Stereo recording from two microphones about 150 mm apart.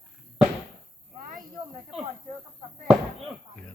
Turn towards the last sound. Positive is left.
turn(degrees=0)  # may be behind; listen again after turning